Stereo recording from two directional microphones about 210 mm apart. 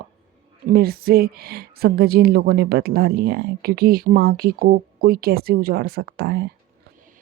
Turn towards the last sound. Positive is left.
turn(degrees=-50)  # may be behind; listen again after turning